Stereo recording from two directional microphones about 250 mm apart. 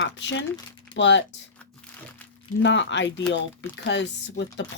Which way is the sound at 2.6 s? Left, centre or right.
Left.